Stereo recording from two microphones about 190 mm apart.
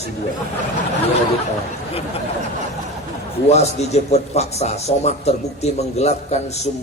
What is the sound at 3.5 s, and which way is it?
A man's voice, 35° left (ahead or behind).